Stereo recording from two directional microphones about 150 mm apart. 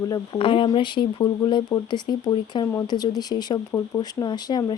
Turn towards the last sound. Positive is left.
turn(degrees=25)  # may be behind; listen again after turning